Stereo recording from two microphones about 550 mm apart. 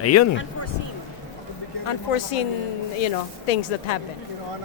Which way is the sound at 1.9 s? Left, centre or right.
Left.